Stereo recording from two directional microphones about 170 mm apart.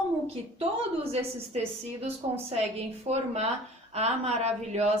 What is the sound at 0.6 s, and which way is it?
A woman's voice, 35° right (ahead or behind).